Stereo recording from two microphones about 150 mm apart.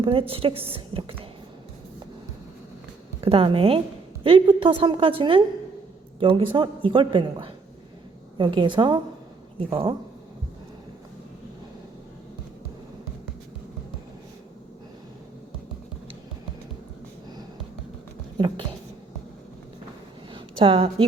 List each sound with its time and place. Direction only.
0.0 s a woman's voice: 35° right (ahead or behind)
3.2 s a woman's voice: 40° right (ahead or behind)
18.3 s speech: 30° right (ahead or behind)
20.3 s a sound: 35° right (ahead or behind)